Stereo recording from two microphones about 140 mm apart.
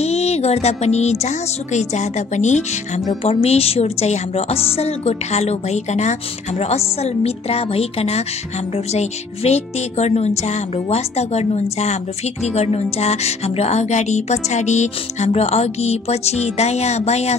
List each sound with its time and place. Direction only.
0.0 s music: 50° left (ahead or behind)
1.2 s a woman's voice: 55° left (ahead or behind)
3.3 s music: 45° left (ahead or behind)